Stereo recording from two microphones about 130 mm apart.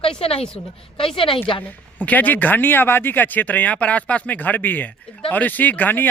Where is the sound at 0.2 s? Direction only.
50° left (ahead or behind).